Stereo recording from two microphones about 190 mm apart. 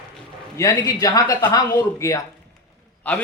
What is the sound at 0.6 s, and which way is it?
A man's voice, 20° left (ahead or behind).